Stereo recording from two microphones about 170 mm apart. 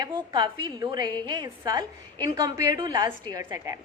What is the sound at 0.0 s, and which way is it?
A woman's voice, 25° right (ahead or behind).